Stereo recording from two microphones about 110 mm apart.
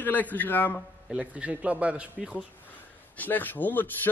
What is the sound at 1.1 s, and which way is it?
A man's voice, 10° right (ahead or behind).